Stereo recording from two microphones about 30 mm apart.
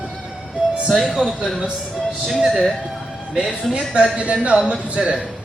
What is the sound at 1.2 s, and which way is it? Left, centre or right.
Speech, centre.